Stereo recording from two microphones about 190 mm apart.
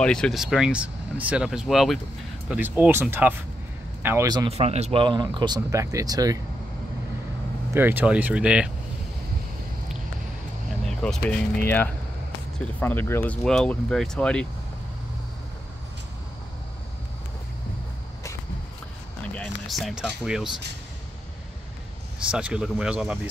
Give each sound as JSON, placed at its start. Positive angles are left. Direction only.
{"t": 0.0, "sound": "speech", "side_deg": 5}
{"t": 4.5, "sound": "speech", "side_deg": -35}
{"t": 7.7, "sound": "speech", "side_deg": -10}
{"t": 10.9, "sound": "speech", "side_deg": 5}
{"t": 19.3, "sound": "speech", "side_deg": 0}
{"t": 22.3, "sound": "speech", "side_deg": -5}